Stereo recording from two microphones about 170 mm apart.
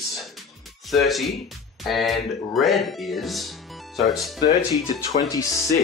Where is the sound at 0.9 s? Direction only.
Centre (ahead or behind).